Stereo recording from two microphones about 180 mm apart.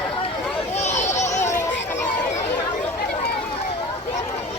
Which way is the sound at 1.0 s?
40° left (ahead or behind).